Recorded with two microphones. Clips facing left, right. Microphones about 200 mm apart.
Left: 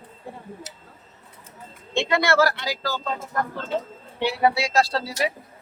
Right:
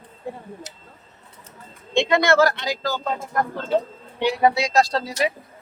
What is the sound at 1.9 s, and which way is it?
Speech, 20° right (ahead or behind).